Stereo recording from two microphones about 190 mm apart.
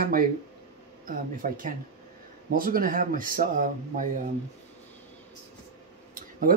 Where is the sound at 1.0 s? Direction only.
45° right (ahead or behind).